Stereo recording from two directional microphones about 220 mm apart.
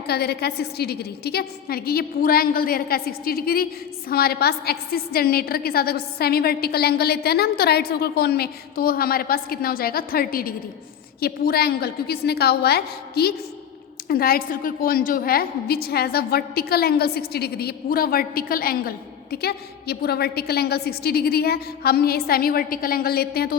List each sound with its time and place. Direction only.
0.1 s a woman's voice: 45° left (ahead or behind)